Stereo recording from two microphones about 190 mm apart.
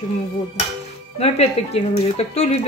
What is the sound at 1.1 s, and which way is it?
Speech, 35° left (ahead or behind).